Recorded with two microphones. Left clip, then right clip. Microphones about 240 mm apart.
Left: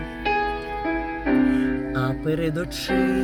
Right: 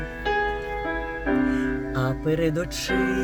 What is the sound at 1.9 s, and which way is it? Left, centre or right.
Music, centre.